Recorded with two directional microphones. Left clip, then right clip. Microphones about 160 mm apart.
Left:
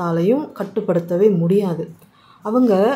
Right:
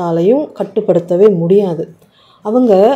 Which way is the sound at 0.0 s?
15° right (ahead or behind).